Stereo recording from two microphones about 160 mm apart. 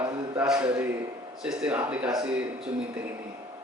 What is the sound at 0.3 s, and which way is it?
Speech, 5° right (ahead or behind).